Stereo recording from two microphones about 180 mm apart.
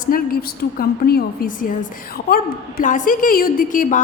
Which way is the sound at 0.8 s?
55° left (ahead or behind).